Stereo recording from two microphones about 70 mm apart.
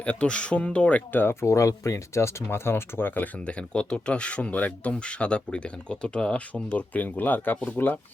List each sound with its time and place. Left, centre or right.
0.0 s speech: centre